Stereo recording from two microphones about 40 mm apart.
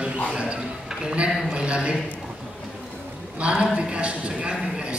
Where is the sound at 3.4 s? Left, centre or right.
Right.